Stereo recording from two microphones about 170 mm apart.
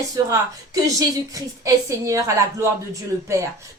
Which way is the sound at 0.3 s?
20° right (ahead or behind).